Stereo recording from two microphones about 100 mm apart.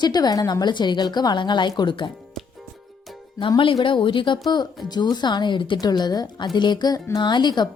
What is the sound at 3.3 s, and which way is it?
Speech, 55° left (ahead or behind).